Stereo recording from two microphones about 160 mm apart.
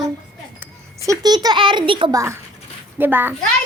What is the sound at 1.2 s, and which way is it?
A child's voice, 25° right (ahead or behind).